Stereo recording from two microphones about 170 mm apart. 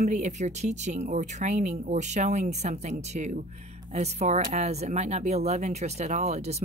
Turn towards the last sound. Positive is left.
turn(degrees=-40)  # may be behind; listen again after turning